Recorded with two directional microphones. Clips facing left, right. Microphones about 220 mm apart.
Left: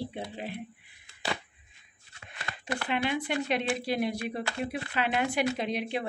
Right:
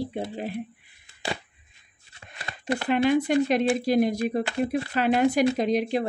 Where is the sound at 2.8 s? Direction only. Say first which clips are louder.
Right 9 dB; 45° right (ahead or behind).